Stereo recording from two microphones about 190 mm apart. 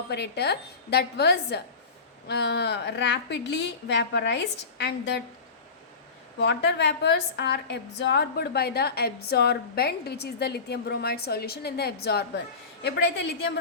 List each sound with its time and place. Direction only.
0.1 s a woman's voice: 60° left (ahead or behind)
6.4 s a woman's voice: 65° left (ahead or behind)